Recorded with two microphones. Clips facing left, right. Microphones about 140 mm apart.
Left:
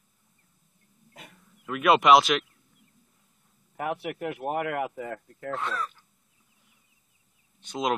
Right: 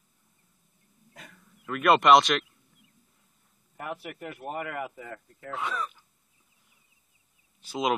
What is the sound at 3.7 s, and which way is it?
Speech, 70° left (ahead or behind).